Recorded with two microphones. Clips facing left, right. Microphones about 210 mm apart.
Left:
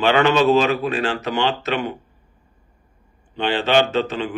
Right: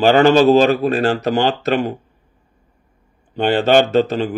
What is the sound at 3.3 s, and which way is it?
Speech, 45° right (ahead or behind).